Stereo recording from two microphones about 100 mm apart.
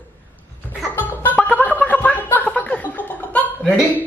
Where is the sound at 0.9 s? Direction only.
15° left (ahead or behind).